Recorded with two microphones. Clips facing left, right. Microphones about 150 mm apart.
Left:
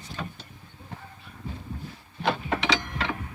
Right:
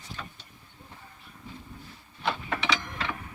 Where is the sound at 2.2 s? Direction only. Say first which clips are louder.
Left 4 dB; 35° left (ahead or behind).